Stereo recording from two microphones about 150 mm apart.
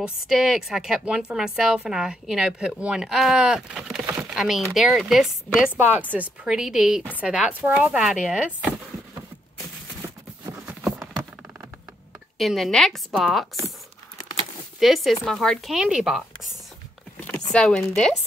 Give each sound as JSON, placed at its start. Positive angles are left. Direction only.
{"t": 0.0, "sound": "a woman's voice", "side_deg": -5}
{"t": 10.6, "sound": "clip-clop", "side_deg": -5}
{"t": 12.4, "sound": "a woman's voice", "side_deg": 0}
{"t": 14.8, "sound": "a woman's voice", "side_deg": 0}
{"t": 17.2, "sound": "chopping", "side_deg": 10}